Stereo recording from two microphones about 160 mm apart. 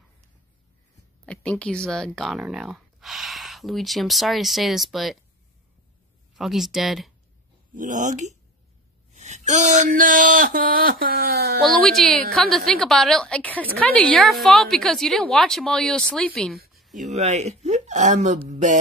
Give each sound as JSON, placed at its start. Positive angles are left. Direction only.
{"t": 1.2, "sound": "speech", "side_deg": 5}
{"t": 6.3, "sound": "a woman's voice", "side_deg": 0}
{"t": 7.7, "sound": "speech", "side_deg": -55}
{"t": 11.6, "sound": "a woman's voice", "side_deg": 5}
{"t": 16.7, "sound": "a sound", "side_deg": 0}
{"t": 17.1, "sound": "speech", "side_deg": -45}